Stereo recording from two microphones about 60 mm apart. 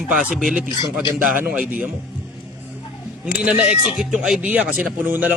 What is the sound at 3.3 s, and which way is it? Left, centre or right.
Speech, centre.